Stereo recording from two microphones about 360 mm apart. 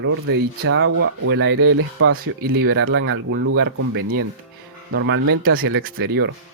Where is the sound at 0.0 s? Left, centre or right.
Right.